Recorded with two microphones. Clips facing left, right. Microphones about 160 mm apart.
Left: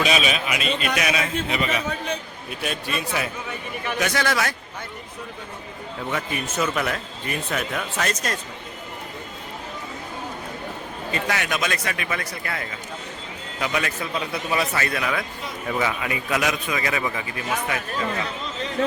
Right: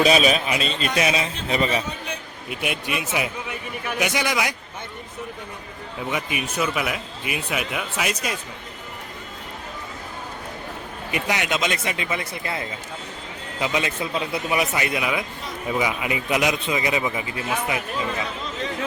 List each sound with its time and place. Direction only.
0.0 s a man's voice: 35° right (ahead or behind)
2.5 s speech: 15° right (ahead or behind)
6.1 s speech: 10° right (ahead or behind)
11.1 s a man's voice: 20° right (ahead or behind)